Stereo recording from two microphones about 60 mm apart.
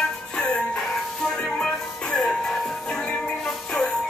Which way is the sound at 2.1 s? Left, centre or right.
Centre.